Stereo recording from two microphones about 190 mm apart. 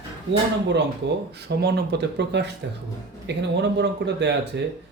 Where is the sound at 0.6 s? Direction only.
65° right (ahead or behind).